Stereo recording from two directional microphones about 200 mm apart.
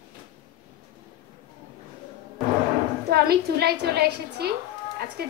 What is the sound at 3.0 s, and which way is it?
A woman's voice, 50° right (ahead or behind).